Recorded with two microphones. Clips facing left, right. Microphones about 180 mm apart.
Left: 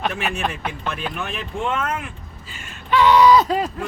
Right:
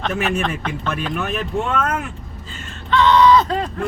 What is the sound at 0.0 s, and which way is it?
Speech, 10° left (ahead or behind).